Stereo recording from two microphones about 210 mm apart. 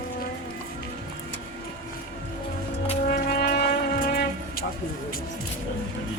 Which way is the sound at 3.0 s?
45° left (ahead or behind).